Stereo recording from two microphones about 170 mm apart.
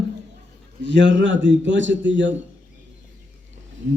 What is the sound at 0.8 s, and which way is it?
A man's voice, 90° right.